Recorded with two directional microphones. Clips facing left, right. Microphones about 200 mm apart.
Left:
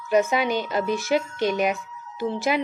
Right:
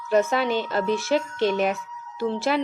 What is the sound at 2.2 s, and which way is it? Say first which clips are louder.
Speech: even; 15° left (ahead or behind).